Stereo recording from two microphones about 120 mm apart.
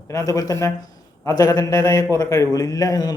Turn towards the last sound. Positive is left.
turn(degrees=30)  # may be behind; listen again after turning